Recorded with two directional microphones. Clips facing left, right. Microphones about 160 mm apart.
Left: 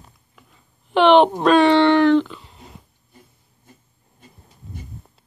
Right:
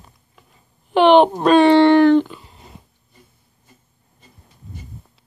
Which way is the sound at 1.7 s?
40° right (ahead or behind).